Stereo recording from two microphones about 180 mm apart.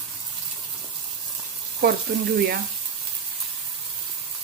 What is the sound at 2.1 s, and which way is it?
Speech, 55° right (ahead or behind).